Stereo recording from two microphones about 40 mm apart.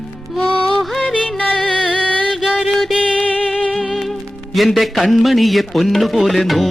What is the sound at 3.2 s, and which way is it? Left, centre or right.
Music, left.